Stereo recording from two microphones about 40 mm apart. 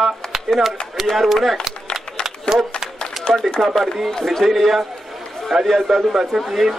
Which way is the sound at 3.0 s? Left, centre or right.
Left.